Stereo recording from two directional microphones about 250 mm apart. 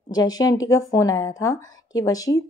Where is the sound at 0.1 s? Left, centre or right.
Centre.